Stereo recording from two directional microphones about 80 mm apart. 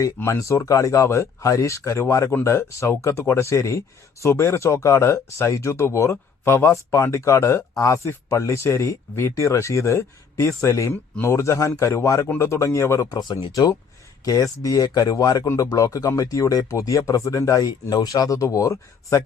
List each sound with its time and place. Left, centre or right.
0.3 s speech: left
13.1 s speech: left